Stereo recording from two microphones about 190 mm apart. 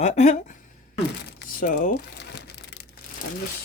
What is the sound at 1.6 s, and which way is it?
Crumpling, 50° left (ahead or behind).